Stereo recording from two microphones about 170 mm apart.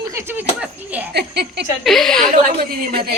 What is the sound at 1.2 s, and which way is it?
Speech, 75° right (ahead or behind).